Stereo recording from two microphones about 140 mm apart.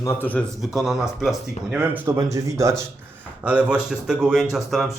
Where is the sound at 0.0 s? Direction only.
15° left (ahead or behind).